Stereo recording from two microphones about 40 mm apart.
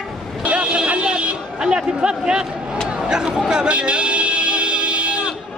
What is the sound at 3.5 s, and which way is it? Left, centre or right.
Music, right.